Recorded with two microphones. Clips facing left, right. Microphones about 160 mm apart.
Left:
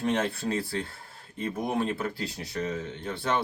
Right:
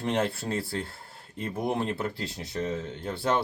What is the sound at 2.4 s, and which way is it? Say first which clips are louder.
Speech: right 3 dB; 25° right (ahead or behind).